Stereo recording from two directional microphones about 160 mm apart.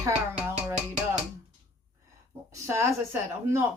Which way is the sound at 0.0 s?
15° right (ahead or behind).